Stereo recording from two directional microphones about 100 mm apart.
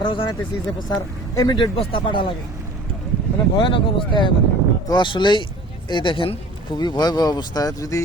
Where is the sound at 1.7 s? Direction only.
60° left (ahead or behind).